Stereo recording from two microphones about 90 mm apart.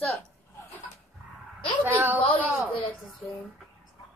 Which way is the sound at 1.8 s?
25° right (ahead or behind).